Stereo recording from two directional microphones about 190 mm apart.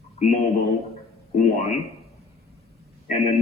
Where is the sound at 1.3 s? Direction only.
40° left (ahead or behind).